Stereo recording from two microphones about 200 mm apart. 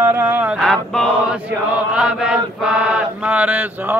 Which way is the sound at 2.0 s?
5° right (ahead or behind).